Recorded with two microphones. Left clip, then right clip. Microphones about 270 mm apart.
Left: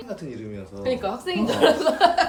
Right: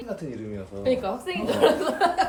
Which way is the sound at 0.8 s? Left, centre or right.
Left.